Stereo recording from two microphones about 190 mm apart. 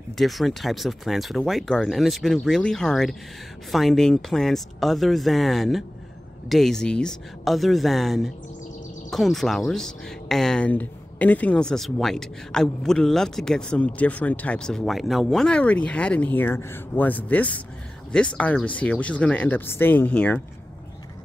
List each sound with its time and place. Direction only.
0.2 s speech: centre (ahead or behind)